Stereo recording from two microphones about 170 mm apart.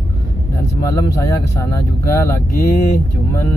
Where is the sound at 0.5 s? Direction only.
20° left (ahead or behind).